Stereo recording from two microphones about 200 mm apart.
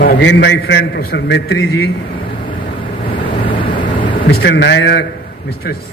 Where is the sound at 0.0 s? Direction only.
60° left (ahead or behind).